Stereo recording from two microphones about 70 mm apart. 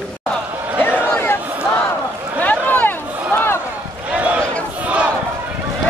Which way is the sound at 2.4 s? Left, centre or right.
Left.